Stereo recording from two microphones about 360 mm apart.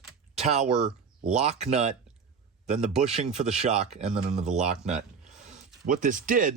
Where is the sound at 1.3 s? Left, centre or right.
Centre.